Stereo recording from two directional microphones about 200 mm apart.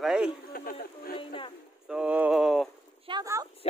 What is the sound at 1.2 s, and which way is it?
Music, 25° left (ahead or behind).